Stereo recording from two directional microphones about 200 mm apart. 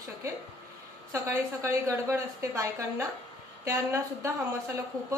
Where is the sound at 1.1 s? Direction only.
15° right (ahead or behind).